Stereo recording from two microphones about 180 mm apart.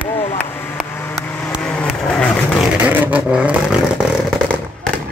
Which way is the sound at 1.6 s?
5° left (ahead or behind).